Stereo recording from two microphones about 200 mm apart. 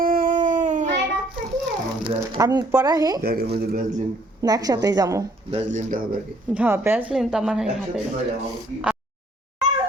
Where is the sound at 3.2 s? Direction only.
50° right (ahead or behind).